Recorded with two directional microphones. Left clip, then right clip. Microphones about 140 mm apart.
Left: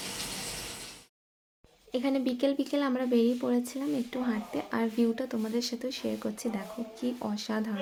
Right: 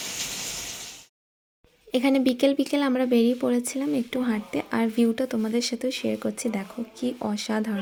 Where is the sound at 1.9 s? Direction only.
55° right (ahead or behind); by 7.7 s 35° right (ahead or behind).